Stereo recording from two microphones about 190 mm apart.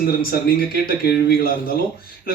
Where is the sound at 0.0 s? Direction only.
55° left (ahead or behind).